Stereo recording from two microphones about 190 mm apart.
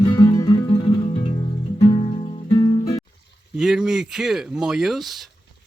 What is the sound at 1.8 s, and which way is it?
Music, 30° left (ahead or behind).